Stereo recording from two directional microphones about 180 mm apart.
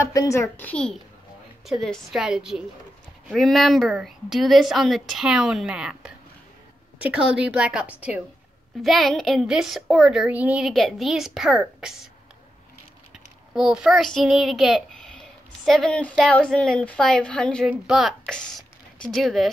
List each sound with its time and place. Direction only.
0.0 s a child's voice: 20° left (ahead or behind); by 12.1 s centre (ahead or behind)
13.6 s a child's voice: 5° right (ahead or behind)